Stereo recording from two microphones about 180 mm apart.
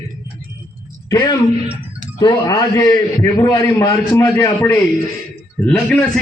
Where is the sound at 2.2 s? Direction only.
20° left (ahead or behind).